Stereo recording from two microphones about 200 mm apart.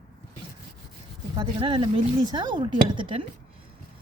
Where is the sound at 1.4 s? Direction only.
25° right (ahead or behind).